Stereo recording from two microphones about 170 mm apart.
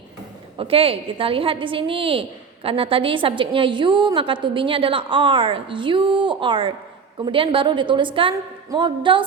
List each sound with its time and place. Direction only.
0.6 s a woman's voice: 35° right (ahead or behind)